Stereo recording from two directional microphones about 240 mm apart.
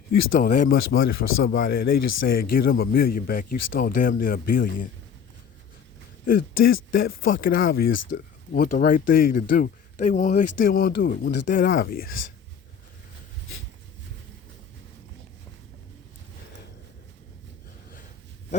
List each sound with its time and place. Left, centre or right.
0.1 s speech: left
1.2 s a man's voice: left
2.0 s speech: left
2.2 s speech: left
6.2 s speech: left